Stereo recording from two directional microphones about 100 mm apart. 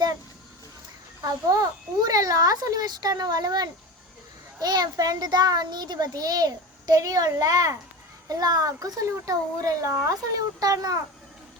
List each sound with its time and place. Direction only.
1.5 s a child's voice: 40° right (ahead or behind)